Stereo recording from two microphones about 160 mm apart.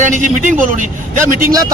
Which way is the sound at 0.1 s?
55° right (ahead or behind).